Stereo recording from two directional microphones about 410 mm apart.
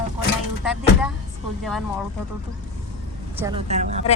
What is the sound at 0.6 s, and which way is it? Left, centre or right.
Speech, centre.